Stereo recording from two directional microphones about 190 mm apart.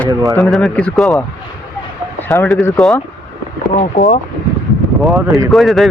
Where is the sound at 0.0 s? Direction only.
Centre (ahead or behind).